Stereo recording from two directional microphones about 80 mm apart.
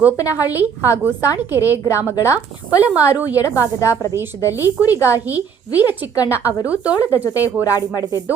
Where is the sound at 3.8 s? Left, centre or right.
Left.